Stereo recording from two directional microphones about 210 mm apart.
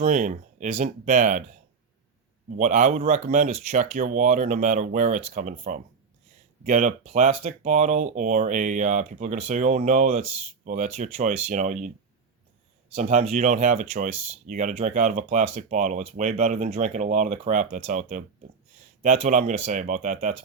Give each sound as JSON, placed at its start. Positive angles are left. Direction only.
{"t": 0.0, "sound": "speech", "side_deg": -35}
{"t": 2.6, "sound": "speech", "side_deg": -35}
{"t": 12.9, "sound": "speech", "side_deg": -35}